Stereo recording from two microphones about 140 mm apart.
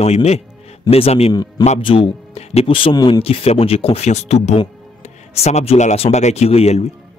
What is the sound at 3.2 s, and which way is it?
Speech, 45° left (ahead or behind).